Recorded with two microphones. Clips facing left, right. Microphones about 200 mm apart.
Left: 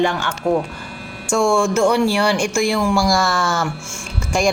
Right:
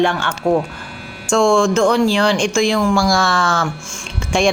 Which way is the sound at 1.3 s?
5° left (ahead or behind).